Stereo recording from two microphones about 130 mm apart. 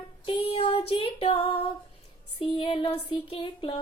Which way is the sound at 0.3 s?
45° left (ahead or behind).